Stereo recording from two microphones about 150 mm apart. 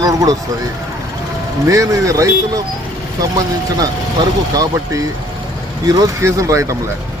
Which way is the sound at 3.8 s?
25° right (ahead or behind).